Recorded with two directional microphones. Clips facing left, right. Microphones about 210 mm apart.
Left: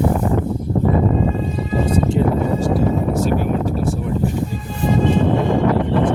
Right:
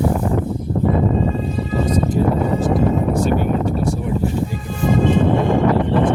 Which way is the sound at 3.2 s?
Centre (ahead or behind).